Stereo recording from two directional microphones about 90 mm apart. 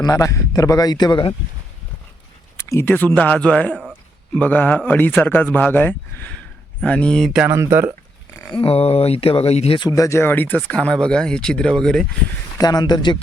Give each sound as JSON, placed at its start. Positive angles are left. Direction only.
{"t": 0.0, "sound": "speech", "side_deg": 40}
{"t": 2.6, "sound": "speech", "side_deg": 25}
{"t": 7.5, "sound": "speech", "side_deg": -30}
{"t": 8.5, "sound": "speech", "side_deg": 90}
{"t": 9.9, "sound": "speech", "side_deg": 35}
{"t": 12.5, "sound": "speech", "side_deg": 50}